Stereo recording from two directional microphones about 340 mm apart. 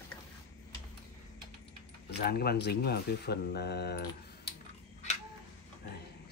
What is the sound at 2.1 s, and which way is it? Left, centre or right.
Speech, left.